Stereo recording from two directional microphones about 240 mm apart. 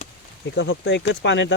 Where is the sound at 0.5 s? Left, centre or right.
Left.